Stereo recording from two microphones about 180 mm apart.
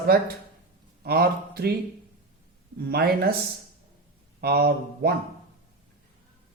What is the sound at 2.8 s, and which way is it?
Speech, 60° right (ahead or behind).